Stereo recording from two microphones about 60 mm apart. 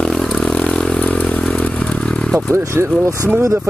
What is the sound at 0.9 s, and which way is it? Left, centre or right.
Motorcycle, left.